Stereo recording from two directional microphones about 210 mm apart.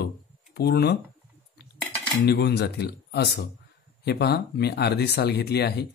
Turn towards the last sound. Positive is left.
turn(degrees=50)  # may be behind; listen again after turning